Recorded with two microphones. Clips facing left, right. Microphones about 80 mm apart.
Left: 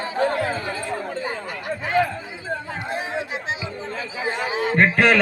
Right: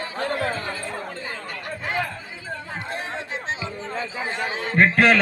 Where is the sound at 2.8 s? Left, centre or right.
Centre.